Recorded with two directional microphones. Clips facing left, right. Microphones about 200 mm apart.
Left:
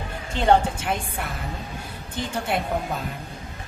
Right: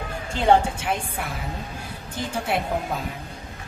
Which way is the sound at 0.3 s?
5° right (ahead or behind).